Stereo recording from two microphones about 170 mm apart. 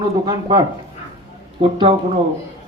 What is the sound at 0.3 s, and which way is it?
Speech, 25° right (ahead or behind).